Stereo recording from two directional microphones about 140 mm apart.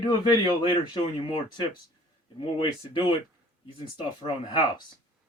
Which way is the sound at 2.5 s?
40° left (ahead or behind).